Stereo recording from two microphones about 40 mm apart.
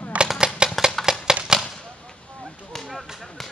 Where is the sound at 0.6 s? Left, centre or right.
Right.